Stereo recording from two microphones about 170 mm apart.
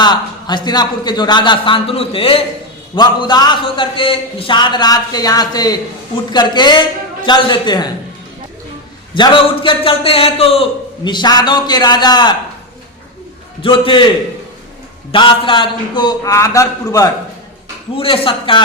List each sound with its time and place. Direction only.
0.0 s a man's voice: 25° left (ahead or behind)
9.1 s a man's voice: 30° left (ahead or behind)
13.6 s a man's voice: 30° left (ahead or behind)
15.1 s a man's voice: 30° left (ahead or behind)
17.9 s a man's voice: 30° left (ahead or behind)